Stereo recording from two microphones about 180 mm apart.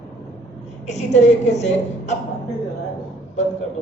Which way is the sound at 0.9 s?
40° left (ahead or behind).